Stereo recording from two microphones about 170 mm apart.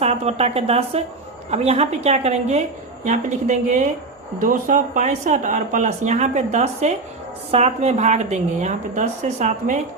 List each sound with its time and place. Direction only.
0.0 s a woman's voice: 40° right (ahead or behind)